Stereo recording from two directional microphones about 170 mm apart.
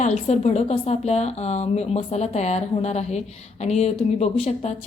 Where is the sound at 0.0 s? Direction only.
40° left (ahead or behind).